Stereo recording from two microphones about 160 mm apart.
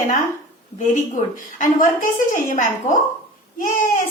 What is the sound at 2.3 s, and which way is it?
Speech, 55° left (ahead or behind).